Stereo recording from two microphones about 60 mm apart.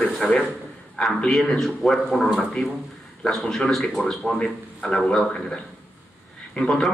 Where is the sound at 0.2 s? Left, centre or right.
Centre.